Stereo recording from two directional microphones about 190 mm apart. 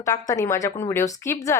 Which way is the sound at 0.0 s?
15° left (ahead or behind).